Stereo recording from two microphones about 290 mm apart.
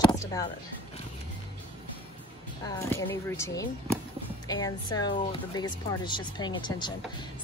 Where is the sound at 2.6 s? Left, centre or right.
Centre.